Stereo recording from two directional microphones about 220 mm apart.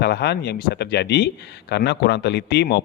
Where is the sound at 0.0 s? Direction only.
50° left (ahead or behind).